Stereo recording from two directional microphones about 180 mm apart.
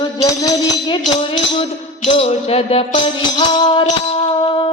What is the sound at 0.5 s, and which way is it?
Music, 30° left (ahead or behind).